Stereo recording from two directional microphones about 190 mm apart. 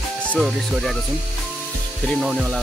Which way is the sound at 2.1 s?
Centre (ahead or behind).